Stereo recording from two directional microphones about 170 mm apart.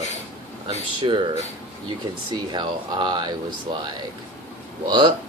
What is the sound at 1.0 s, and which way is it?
Speech, 30° right (ahead or behind).